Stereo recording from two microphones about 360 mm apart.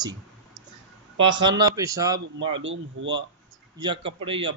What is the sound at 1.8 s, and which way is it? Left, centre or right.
Speech, centre.